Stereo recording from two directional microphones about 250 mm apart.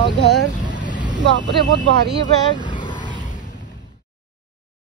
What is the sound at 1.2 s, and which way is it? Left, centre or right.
Speech, right.